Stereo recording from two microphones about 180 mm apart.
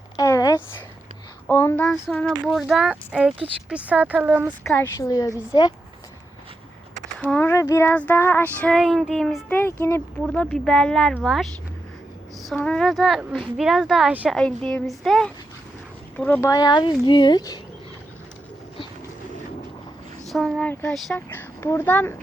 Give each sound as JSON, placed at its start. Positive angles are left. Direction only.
{"t": 0.2, "sound": "a sound", "side_deg": 20}
{"t": 1.5, "sound": "speech", "side_deg": 10}
{"t": 4.6, "sound": "speech", "side_deg": 15}
{"t": 5.3, "sound": "speech", "side_deg": -5}
{"t": 7.2, "sound": "child singing", "side_deg": 10}
{"t": 10.2, "sound": "speech", "side_deg": 5}
{"t": 12.5, "sound": "speech", "side_deg": 5}
{"t": 14.3, "sound": "speech", "side_deg": 5}
{"t": 20.2, "sound": "speech", "side_deg": 0}